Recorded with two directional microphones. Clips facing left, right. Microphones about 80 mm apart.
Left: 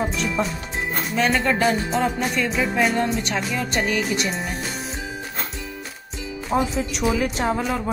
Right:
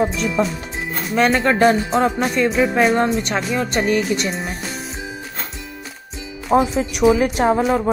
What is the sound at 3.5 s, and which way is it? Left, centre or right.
Speech, right.